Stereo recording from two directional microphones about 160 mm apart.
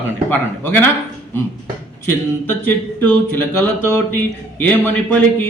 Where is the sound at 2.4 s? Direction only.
10° left (ahead or behind).